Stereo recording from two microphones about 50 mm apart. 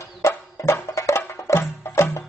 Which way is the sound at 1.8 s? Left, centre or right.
Left.